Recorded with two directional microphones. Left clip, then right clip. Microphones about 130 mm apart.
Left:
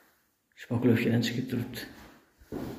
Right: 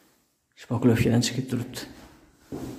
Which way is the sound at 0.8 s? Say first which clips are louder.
Right 4 dB; 50° right (ahead or behind).